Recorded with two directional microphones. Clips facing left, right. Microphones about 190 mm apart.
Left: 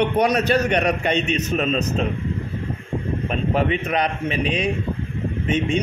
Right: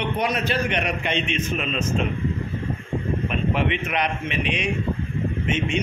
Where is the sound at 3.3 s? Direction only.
40° left (ahead or behind).